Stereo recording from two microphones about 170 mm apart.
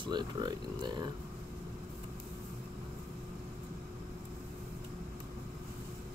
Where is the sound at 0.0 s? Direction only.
25° right (ahead or behind).